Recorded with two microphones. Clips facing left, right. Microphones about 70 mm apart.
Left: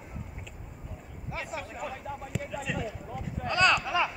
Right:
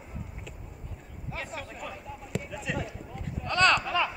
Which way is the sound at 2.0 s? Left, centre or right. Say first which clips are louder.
Left 4 dB; left.